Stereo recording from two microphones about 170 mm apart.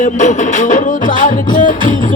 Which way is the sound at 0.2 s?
45° left (ahead or behind).